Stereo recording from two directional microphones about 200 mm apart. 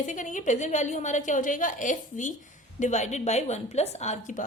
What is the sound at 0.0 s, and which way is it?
A woman's voice, 40° left (ahead or behind).